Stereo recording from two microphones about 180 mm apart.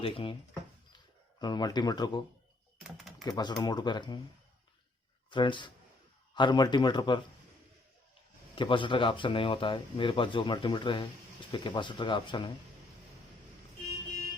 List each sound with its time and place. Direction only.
0.0 s speech: 30° left (ahead or behind)
3.2 s speech: 20° left (ahead or behind)
5.3 s speech: 25° left (ahead or behind)
8.5 s speech: 30° left (ahead or behind)